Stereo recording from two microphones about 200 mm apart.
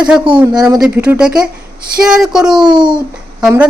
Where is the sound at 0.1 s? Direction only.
5° right (ahead or behind).